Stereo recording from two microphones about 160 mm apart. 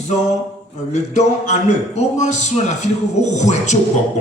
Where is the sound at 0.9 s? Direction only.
45° left (ahead or behind).